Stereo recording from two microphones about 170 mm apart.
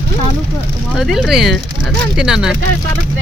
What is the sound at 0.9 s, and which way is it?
Speech, centre (ahead or behind).